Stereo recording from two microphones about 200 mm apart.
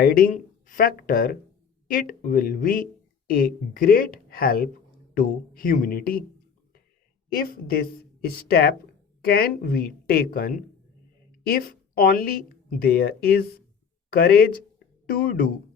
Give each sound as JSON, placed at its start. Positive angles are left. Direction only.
{"t": 0.0, "sound": "speech", "side_deg": 45}
{"t": 7.4, "sound": "a woman's voice", "side_deg": 50}